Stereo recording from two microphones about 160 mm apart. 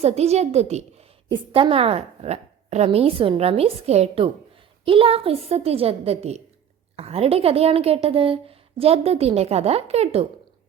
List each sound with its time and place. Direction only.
0.0 s a woman's voice: 40° right (ahead or behind)